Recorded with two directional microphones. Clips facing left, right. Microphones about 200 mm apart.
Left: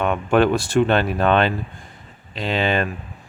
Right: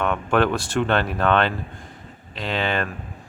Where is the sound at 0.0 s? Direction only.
15° left (ahead or behind).